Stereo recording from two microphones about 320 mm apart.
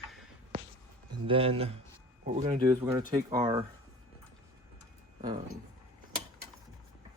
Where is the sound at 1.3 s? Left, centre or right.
Centre.